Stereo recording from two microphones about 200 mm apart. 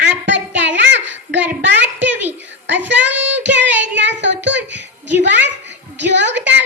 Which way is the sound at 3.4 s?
60° right (ahead or behind).